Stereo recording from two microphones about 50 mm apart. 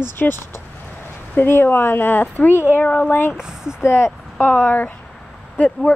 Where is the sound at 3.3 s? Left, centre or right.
Centre.